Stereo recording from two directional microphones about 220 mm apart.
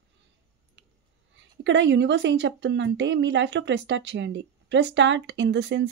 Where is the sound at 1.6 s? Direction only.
55° right (ahead or behind).